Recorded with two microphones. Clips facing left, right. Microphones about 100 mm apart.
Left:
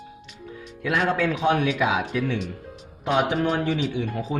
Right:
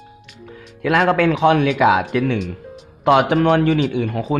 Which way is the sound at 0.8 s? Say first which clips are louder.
Right 7 dB; 70° right (ahead or behind).